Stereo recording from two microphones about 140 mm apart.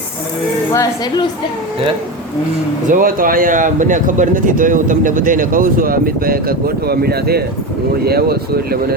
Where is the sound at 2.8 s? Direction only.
75° right (ahead or behind).